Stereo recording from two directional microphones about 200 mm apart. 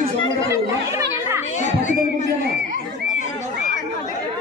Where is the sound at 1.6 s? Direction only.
35° left (ahead or behind).